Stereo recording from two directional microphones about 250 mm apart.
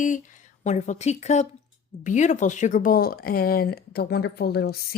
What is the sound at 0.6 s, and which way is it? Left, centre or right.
Speech, left.